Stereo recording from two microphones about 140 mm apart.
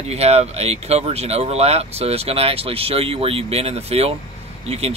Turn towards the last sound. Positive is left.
turn(degrees=-45)  # may be behind; listen again after turning